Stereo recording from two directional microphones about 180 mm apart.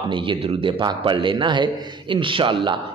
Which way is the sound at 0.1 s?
30° right (ahead or behind).